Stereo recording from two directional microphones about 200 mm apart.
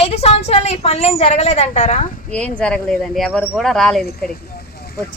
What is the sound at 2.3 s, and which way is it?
Speech, 5° left (ahead or behind).